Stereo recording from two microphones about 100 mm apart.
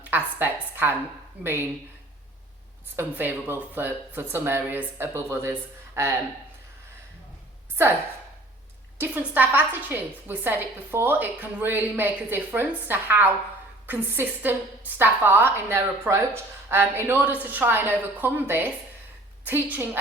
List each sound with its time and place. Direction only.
0.0 s a woman's voice: 20° right (ahead or behind)
2.8 s a woman's voice: 20° right (ahead or behind)
9.0 s a woman's voice: 20° right (ahead or behind)
19.7 s a woman's voice: 20° right (ahead or behind)